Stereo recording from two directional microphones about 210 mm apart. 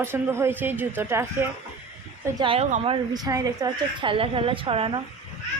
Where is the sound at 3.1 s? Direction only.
20° right (ahead or behind).